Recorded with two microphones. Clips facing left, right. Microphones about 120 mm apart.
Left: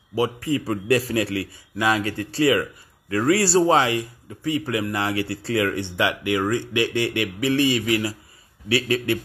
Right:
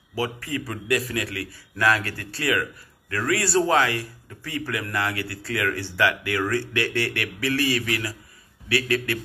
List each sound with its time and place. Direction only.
0.1 s speech: 20° left (ahead or behind)